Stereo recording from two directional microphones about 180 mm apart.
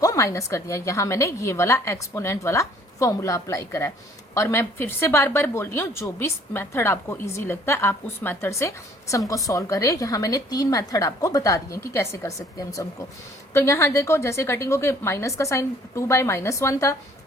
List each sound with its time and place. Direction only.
0.0 s a woman's voice: 20° left (ahead or behind)